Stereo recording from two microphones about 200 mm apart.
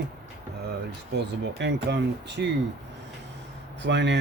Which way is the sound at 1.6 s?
60° right (ahead or behind).